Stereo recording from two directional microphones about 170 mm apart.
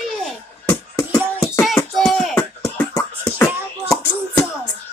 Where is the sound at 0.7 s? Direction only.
15° left (ahead or behind).